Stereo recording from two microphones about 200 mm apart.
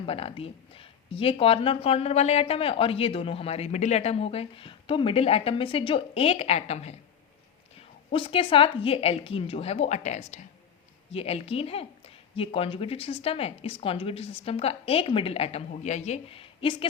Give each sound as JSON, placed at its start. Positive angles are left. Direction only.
{"t": 0.0, "sound": "speech", "side_deg": 30}
{"t": 8.1, "sound": "speech", "side_deg": 25}